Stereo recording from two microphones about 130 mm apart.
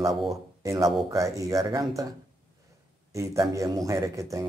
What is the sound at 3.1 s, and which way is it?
Speech, 25° right (ahead or behind).